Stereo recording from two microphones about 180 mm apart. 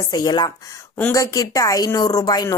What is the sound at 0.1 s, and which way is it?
A woman's voice, 20° left (ahead or behind).